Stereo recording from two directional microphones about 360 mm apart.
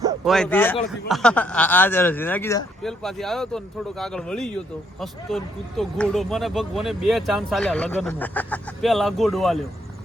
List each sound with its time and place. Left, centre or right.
0.0 s a man's voice: centre